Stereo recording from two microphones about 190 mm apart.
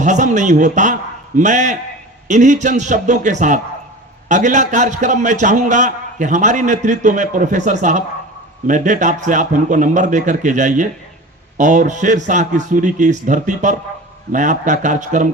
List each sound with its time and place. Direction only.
0.0 s a man's voice: 40° right (ahead or behind)